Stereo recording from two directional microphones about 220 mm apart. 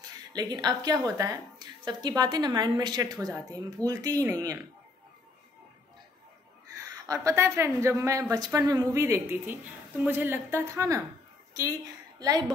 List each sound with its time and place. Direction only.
0.3 s a woman's voice: 20° right (ahead or behind)
7.1 s a woman's voice: 15° right (ahead or behind)
12.2 s a woman's voice: 20° right (ahead or behind)